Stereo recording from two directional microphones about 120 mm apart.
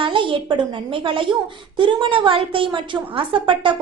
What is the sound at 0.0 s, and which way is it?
A woman's voice, 45° right (ahead or behind).